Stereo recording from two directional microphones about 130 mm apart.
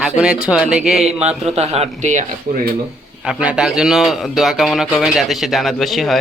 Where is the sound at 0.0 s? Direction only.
5° right (ahead or behind).